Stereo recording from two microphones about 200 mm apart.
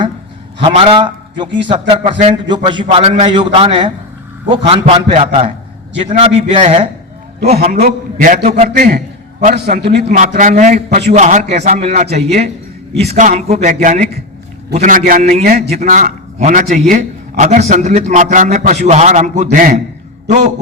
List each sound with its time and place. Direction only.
0.6 s a man's voice: 25° right (ahead or behind)
7.5 s a man's voice: 50° right (ahead or behind)
9.6 s a man's voice: 50° right (ahead or behind); by 20.5 s 35° right (ahead or behind)